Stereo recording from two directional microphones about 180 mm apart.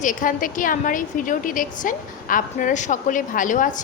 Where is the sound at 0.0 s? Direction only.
45° left (ahead or behind).